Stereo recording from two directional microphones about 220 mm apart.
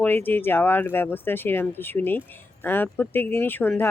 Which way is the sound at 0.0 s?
10° left (ahead or behind).